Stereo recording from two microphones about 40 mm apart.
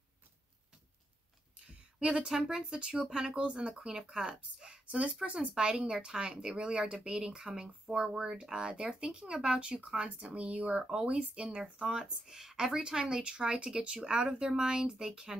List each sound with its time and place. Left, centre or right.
1.7 s a sound: right
2.1 s speech: centre
3.3 s speech: right
4.6 s a sound: right
4.8 s speech: right
10.8 s speech: centre
11.1 s speech: right
11.8 s speech: centre